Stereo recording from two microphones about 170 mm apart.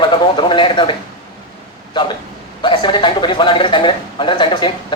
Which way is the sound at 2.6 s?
30° left (ahead or behind).